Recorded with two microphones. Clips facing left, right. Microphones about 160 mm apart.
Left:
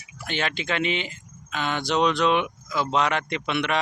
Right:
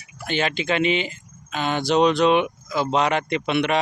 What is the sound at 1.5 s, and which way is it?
Speech, 35° right (ahead or behind).